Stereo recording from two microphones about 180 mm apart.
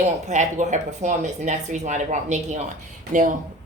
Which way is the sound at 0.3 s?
40° right (ahead or behind).